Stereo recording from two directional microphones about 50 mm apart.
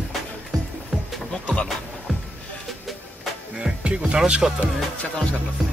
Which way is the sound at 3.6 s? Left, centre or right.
Centre.